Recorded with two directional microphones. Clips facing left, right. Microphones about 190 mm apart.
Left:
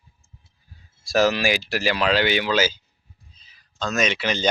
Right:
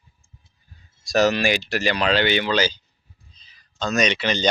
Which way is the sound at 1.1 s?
Centre (ahead or behind).